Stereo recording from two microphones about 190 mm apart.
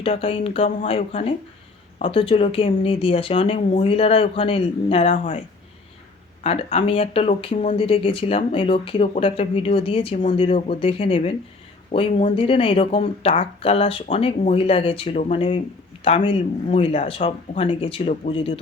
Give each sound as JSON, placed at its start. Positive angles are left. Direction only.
{"t": 0.0, "sound": "speech", "side_deg": 30}
{"t": 6.4, "sound": "speech", "side_deg": 35}